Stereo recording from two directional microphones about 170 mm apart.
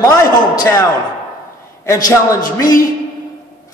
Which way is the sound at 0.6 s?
20° left (ahead or behind).